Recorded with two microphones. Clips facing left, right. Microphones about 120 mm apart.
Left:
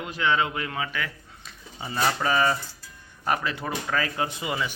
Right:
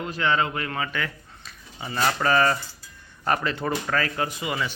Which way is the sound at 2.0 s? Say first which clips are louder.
Right 2 dB; 10° left (ahead or behind).